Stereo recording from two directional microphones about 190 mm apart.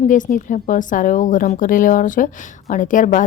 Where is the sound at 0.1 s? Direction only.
45° left (ahead or behind).